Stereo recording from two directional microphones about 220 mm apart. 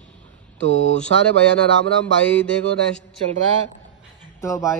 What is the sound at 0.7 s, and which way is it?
Speech, 60° right (ahead or behind).